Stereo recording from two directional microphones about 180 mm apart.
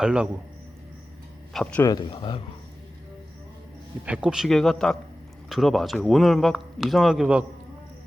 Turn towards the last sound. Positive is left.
turn(degrees=-5)  # may be behind; listen again after turning